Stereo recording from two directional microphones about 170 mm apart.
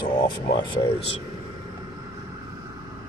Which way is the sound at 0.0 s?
25° left (ahead or behind).